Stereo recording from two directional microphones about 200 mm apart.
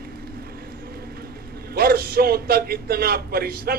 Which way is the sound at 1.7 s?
50° right (ahead or behind).